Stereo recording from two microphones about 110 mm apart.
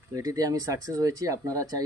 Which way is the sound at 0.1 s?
30° right (ahead or behind).